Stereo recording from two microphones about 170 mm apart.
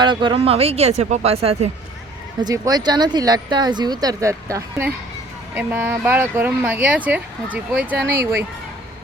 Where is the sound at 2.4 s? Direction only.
20° right (ahead or behind).